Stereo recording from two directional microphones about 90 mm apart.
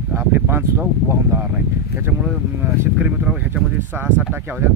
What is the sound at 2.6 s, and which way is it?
Speech, 20° right (ahead or behind).